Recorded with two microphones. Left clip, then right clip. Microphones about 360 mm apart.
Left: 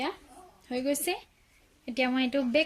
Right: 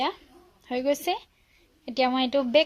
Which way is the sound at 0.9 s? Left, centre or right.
Centre.